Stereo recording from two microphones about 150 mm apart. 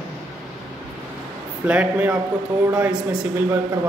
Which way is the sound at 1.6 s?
10° right (ahead or behind).